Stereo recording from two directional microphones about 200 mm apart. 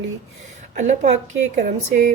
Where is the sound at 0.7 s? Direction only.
40° right (ahead or behind).